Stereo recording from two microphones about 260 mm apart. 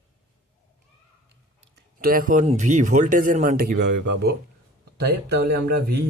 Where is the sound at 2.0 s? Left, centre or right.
Right.